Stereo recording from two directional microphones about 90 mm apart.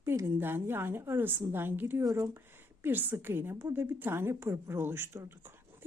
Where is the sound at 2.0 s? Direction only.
35° right (ahead or behind).